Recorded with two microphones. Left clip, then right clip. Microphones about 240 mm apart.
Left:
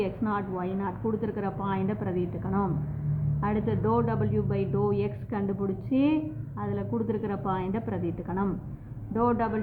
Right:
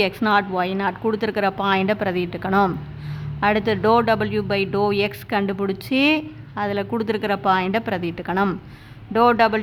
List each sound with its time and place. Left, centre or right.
0.0 s speech: right